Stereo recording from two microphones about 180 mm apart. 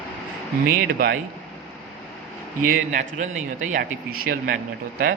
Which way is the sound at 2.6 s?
45° right (ahead or behind).